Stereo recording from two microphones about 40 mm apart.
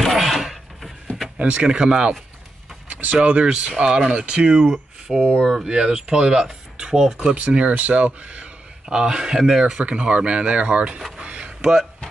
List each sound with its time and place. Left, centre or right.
0.0 s wood: centre
1.4 s speech: right
2.9 s vehicle: right
3.3 s speech: right
3.8 s speech: centre
5.4 s speech: centre
5.7 s speech: right
7.3 s speech: right
8.8 s speech: centre
9.8 s speech: right
11.1 s a sound: right